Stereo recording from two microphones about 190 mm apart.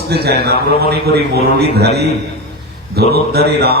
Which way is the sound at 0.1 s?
55° right (ahead or behind).